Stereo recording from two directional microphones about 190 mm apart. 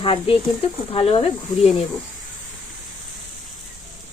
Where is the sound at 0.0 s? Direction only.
30° left (ahead or behind).